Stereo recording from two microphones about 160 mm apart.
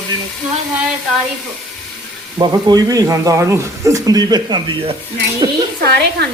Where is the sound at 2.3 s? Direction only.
25° right (ahead or behind).